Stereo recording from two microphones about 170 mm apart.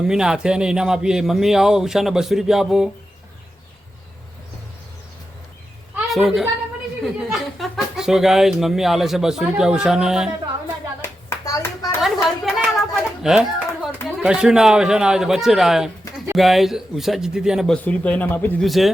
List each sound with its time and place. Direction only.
0.1 s speech: 5° right (ahead or behind)
6.1 s a woman's voice: centre (ahead or behind)
11.0 s clapping: 15° left (ahead or behind)
11.9 s a sound: centre (ahead or behind)
14.2 s speech: 5° right (ahead or behind)
17.8 s speech: 10° left (ahead or behind)
18.6 s speech: centre (ahead or behind)